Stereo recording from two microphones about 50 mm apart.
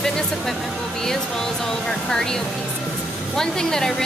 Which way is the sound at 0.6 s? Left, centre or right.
Centre.